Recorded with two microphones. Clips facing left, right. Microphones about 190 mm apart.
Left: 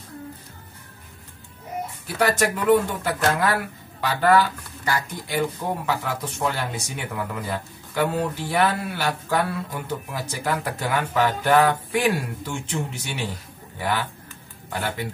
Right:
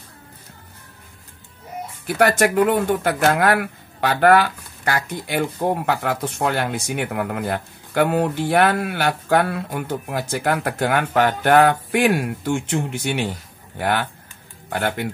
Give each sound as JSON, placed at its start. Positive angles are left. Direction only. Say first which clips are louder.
{"t": 2.0, "sound": "speech", "louder": "right 5 dB", "side_deg": -60}